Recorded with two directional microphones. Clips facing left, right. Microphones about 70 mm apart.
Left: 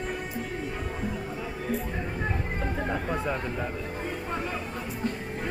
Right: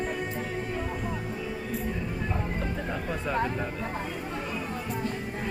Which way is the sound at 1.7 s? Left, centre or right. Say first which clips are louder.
Left 6 dB; left.